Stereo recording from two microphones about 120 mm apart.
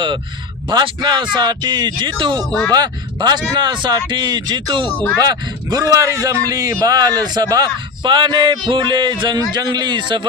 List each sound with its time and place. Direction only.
0.7 s a man's voice: 40° right (ahead or behind)